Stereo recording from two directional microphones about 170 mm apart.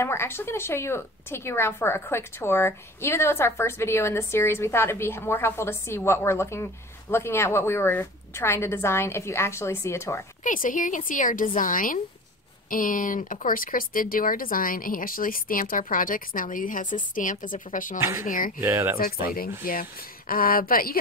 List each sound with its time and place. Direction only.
0.0 s a woman's voice: 15° left (ahead or behind)
10.4 s a woman's voice: 50° left (ahead or behind)
18.6 s speech: 15° right (ahead or behind)
18.9 s speech: 60° left (ahead or behind)